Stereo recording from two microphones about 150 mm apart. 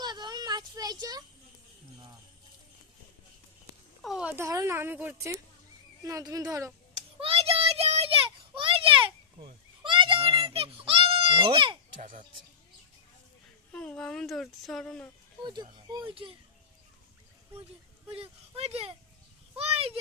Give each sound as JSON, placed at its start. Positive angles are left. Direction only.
{"t": 0.0, "sound": "a sound", "side_deg": -30}
{"t": 4.0, "sound": "speech", "side_deg": 0}
{"t": 4.4, "sound": "a woman's voice", "side_deg": -20}
{"t": 7.2, "sound": "a sound", "side_deg": -40}
{"t": 11.9, "sound": "speech", "side_deg": -60}
{"t": 13.7, "sound": "speech", "side_deg": 5}
{"t": 15.4, "sound": "speech", "side_deg": -30}
{"t": 18.1, "sound": "speech", "side_deg": -40}